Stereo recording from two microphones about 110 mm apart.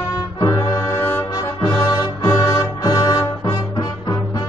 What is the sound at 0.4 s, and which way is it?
Music, 30° left (ahead or behind).